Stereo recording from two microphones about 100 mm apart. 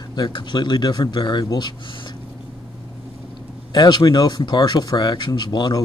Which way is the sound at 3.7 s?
45° left (ahead or behind).